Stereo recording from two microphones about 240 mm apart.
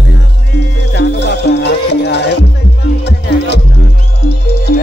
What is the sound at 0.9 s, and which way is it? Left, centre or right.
Music, left.